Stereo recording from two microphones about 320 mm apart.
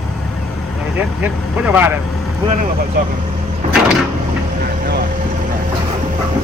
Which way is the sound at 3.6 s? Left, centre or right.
Right.